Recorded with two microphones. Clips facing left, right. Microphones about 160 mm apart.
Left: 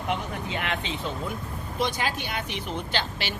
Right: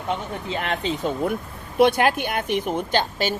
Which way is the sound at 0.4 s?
35° right (ahead or behind).